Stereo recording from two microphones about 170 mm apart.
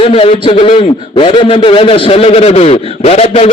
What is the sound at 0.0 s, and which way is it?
A man's voice, 30° left (ahead or behind).